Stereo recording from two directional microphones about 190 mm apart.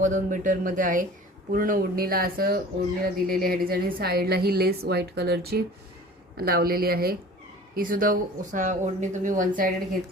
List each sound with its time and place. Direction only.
0.0 s a woman's voice: 45° right (ahead or behind)